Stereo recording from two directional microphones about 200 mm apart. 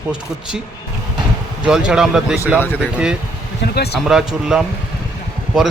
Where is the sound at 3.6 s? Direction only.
55° left (ahead or behind).